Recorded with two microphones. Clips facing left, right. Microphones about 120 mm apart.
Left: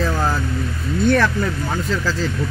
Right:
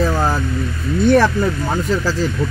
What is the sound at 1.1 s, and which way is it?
Speech, 30° right (ahead or behind).